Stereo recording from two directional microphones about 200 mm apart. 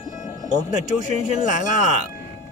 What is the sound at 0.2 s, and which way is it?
Speech, 40° left (ahead or behind).